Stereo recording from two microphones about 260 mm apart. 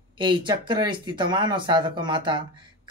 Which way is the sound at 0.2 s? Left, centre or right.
Centre.